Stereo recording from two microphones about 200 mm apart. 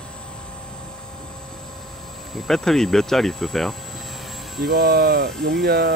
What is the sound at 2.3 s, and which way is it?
Speech, centre (ahead or behind).